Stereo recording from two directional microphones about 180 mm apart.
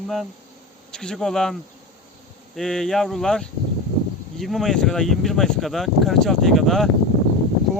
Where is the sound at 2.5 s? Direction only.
5° left (ahead or behind).